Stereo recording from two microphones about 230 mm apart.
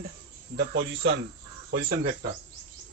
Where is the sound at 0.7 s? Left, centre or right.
Right.